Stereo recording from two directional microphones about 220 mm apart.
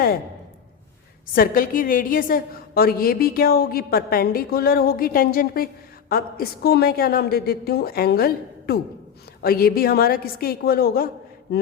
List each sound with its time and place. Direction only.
1.4 s a woman's voice: 40° left (ahead or behind)